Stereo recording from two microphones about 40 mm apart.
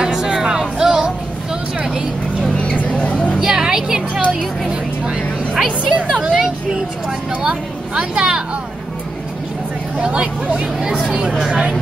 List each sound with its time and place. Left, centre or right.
0.0 s music: centre
2.5 s vehicle: left
3.3 s a woman's voice: centre
4.6 s vehicle: right
6.3 s vehicle: centre
7.4 s speech: right
9.9 s speech: right